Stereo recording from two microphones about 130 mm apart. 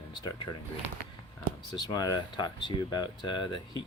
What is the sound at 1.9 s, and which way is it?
Speech, 30° left (ahead or behind).